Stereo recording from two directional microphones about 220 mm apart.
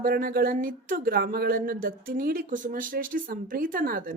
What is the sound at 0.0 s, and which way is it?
Speech, 40° right (ahead or behind).